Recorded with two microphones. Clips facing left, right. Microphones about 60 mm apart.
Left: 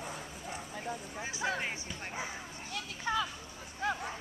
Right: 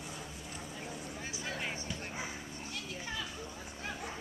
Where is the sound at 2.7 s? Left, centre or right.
Left.